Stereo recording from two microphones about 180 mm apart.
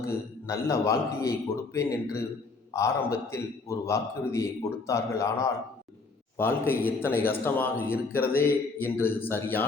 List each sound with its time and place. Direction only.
0.0 s a man's voice: 15° left (ahead or behind)